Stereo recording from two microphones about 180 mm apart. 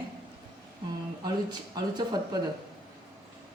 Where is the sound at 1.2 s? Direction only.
25° right (ahead or behind).